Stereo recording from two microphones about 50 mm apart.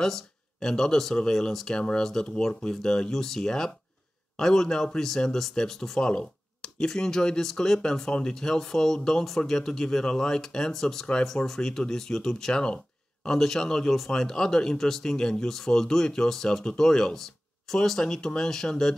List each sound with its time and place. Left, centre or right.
0.0 s speech: centre
1.8 s speech: centre